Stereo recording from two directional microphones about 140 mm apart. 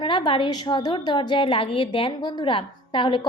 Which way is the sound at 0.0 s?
35° left (ahead or behind).